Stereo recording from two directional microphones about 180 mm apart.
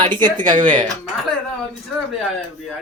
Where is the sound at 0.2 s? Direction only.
25° right (ahead or behind).